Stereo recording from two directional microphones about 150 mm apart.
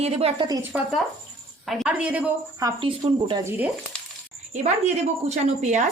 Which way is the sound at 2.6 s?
30° right (ahead or behind).